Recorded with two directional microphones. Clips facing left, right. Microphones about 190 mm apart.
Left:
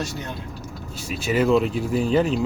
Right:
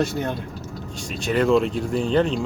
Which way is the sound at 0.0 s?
55° right (ahead or behind).